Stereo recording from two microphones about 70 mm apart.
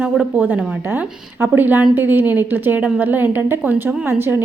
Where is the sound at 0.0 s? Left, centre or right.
Right.